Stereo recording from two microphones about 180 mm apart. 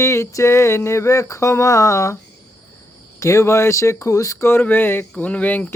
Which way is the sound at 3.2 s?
15° left (ahead or behind).